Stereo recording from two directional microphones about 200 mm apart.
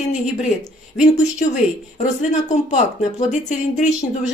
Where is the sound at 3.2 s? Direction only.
35° left (ahead or behind).